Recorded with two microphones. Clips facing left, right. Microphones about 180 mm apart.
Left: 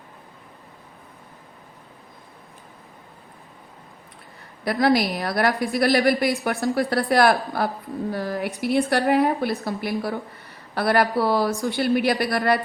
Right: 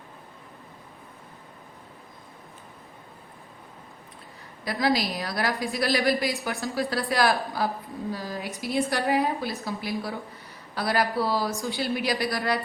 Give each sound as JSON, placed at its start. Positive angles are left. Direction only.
{"t": 4.6, "sound": "a woman's voice", "side_deg": 60}